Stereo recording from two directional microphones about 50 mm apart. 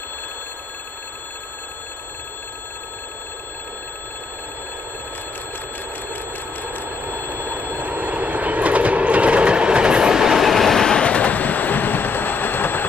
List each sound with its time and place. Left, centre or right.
6.8 s telephone bell ringing: right; by 12.8 s left